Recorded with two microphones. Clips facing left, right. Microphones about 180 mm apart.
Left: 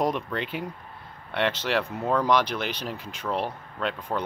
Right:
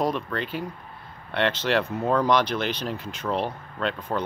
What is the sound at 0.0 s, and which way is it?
Speech, 20° left (ahead or behind).